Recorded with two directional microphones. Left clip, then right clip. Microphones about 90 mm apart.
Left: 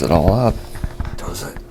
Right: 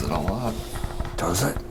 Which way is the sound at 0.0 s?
40° left (ahead or behind).